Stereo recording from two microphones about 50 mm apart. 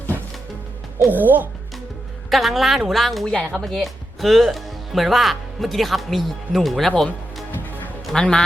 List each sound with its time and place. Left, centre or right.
0.9 s speech: right
2.3 s speech: centre
3.2 s a woman's voice: left
3.5 s speech: centre
8.1 s a man's voice: centre